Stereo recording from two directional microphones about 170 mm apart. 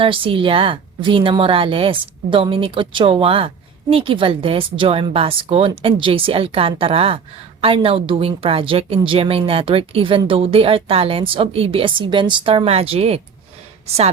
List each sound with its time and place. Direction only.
0.0 s a woman's voice: 30° right (ahead or behind)